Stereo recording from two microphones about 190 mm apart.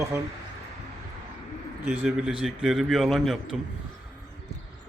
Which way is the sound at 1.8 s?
5° right (ahead or behind).